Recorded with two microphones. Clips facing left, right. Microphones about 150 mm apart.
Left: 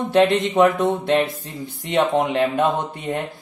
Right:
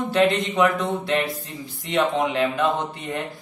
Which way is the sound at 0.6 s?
50° left (ahead or behind).